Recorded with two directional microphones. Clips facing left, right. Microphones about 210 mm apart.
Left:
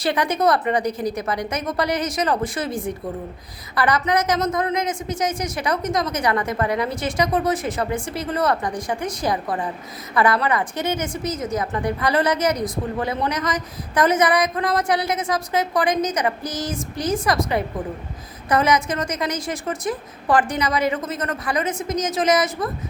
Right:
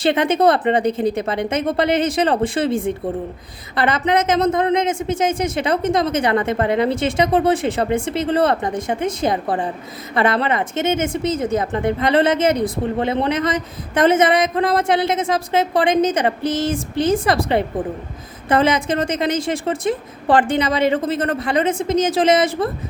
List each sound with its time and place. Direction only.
0.0 s a woman's voice: 25° right (ahead or behind)